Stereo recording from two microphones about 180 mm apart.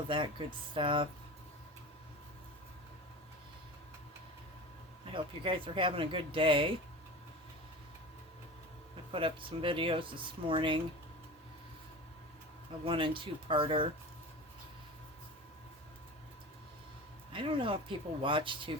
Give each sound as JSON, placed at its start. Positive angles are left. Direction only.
{"t": 0.1, "sound": "speech", "side_deg": -25}
{"t": 5.1, "sound": "speech", "side_deg": -30}
{"t": 9.1, "sound": "speech", "side_deg": -30}
{"t": 12.8, "sound": "speech", "side_deg": -30}
{"t": 17.3, "sound": "speech", "side_deg": -30}